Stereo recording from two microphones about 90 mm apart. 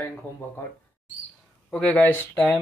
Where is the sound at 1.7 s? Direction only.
15° left (ahead or behind).